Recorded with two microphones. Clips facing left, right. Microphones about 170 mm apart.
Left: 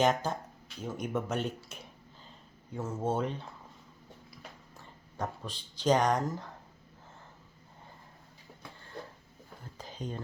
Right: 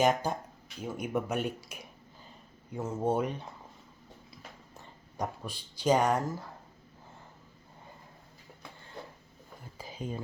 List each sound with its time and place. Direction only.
0.0 s speech: 10° right (ahead or behind)
4.8 s speech: 15° right (ahead or behind)
9.7 s a sound: 10° right (ahead or behind)